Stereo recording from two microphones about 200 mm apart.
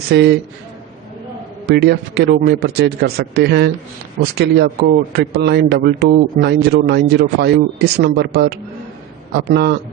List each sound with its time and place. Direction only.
0.1 s speech: 55° right (ahead or behind)
1.6 s speech: 55° right (ahead or behind)